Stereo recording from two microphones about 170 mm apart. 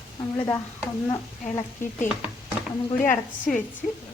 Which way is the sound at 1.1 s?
20° left (ahead or behind).